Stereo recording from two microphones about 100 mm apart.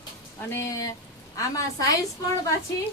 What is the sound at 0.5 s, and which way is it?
Speech, 30° left (ahead or behind).